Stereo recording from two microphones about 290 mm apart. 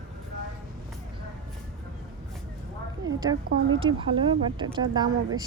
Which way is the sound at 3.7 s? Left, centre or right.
Centre.